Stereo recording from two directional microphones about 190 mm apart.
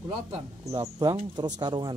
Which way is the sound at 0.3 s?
15° right (ahead or behind).